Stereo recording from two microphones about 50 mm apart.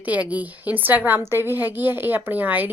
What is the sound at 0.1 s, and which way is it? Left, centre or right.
A woman's voice, right.